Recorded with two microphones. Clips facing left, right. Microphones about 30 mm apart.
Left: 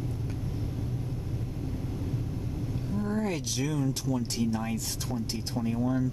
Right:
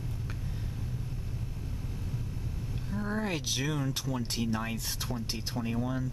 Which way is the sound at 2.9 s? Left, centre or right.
Right.